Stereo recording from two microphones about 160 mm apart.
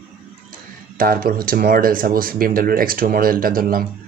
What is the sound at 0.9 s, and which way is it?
Speech, 65° right (ahead or behind).